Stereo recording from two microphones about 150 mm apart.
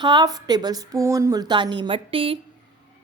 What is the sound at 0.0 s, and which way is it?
A woman's voice, 30° right (ahead or behind).